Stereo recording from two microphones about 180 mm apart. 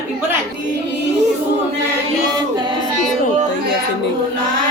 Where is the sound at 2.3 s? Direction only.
25° right (ahead or behind).